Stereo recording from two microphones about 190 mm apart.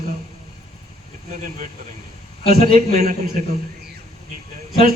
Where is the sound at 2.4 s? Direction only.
50° right (ahead or behind).